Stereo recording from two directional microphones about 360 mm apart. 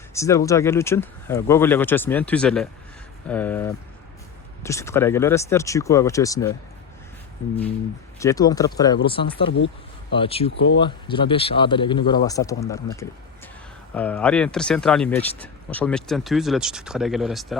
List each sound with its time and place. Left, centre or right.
0.1 s speech: centre
8.2 s speech: centre
9.6 s a sound: left
10.2 s speech: centre